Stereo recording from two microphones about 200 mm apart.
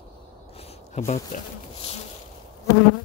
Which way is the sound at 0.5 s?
30° left (ahead or behind).